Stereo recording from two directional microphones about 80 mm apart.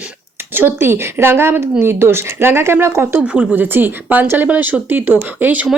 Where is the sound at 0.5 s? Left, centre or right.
Right.